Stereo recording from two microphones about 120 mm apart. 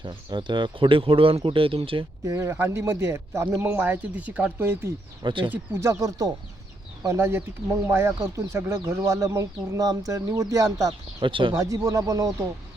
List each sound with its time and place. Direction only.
0.0 s speech: 40° right (ahead or behind)
2.2 s speech: 25° right (ahead or behind)
5.2 s speech: 40° right (ahead or behind)
5.5 s speech: 25° right (ahead or behind)
11.2 s speech: 45° right (ahead or behind)
11.5 s speech: 25° right (ahead or behind)